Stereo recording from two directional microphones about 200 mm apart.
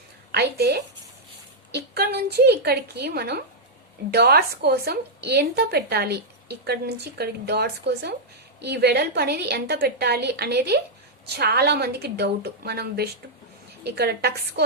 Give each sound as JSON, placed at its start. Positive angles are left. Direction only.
{"t": 0.3, "sound": "a woman's voice", "side_deg": -55}